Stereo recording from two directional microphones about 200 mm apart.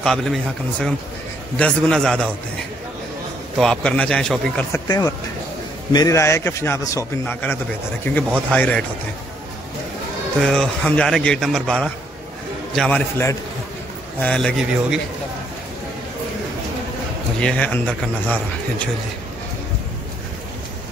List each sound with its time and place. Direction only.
0.0 s a man's voice: centre (ahead or behind)
3.5 s a man's voice: 5° left (ahead or behind)
4.8 s a man's voice: 20° left (ahead or behind)
8.5 s a man's voice: 5° left (ahead or behind)
10.4 s a man's voice: centre (ahead or behind)
17.4 s a man's voice: 5° left (ahead or behind)